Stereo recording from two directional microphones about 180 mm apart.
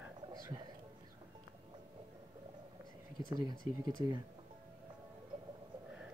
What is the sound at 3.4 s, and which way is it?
Speech, 20° right (ahead or behind).